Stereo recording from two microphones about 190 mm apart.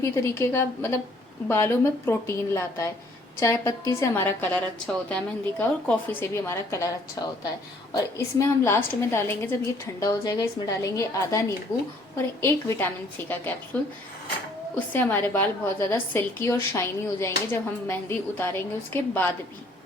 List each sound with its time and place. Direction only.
0.2 s a woman's voice: 15° left (ahead or behind)
14.9 s a woman's voice: 10° left (ahead or behind)